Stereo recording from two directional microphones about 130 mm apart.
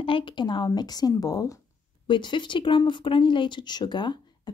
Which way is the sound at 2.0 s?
35° left (ahead or behind).